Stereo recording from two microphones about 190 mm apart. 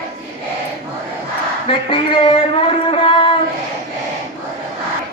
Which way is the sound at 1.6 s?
25° left (ahead or behind).